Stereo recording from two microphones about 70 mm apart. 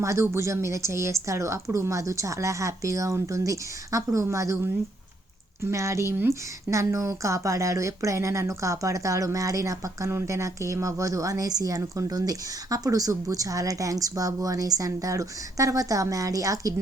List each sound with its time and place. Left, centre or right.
0.0 s speech: right
5.7 s a woman's voice: right